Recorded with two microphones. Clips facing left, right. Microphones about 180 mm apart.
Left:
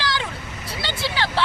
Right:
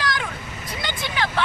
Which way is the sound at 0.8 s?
30° left (ahead or behind).